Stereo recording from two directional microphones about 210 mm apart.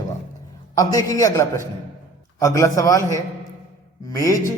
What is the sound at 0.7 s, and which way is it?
A man's voice, 15° left (ahead or behind).